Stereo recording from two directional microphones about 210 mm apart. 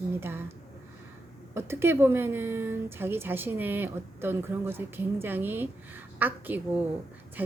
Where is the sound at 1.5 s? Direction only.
10° right (ahead or behind).